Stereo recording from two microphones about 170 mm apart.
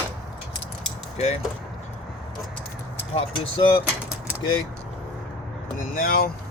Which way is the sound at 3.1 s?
30° left (ahead or behind).